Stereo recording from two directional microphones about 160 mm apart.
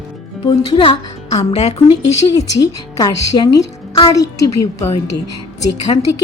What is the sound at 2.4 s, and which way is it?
A woman's voice, 20° left (ahead or behind).